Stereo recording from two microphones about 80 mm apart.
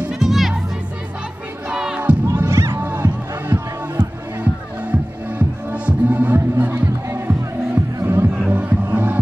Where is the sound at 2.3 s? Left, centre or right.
Right.